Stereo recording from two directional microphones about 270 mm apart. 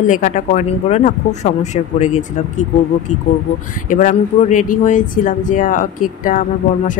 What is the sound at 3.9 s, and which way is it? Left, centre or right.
Speech, left.